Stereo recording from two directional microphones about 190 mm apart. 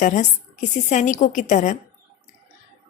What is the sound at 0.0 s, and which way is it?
A woman's voice, 40° left (ahead or behind).